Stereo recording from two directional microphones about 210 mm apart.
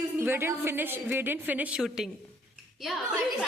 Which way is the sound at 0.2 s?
10° right (ahead or behind).